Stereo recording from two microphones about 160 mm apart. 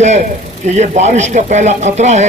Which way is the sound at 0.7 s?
45° right (ahead or behind).